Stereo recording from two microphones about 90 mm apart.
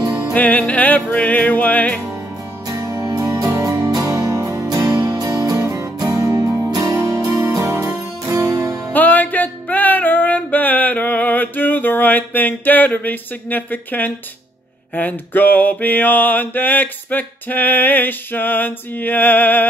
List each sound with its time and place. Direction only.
0.3 s music: 15° left (ahead or behind)
2.7 s music: 40° right (ahead or behind)
8.9 s music: 20° left (ahead or behind)
15.0 s mantra: 20° left (ahead or behind)